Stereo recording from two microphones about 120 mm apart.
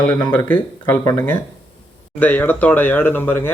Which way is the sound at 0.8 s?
20° left (ahead or behind).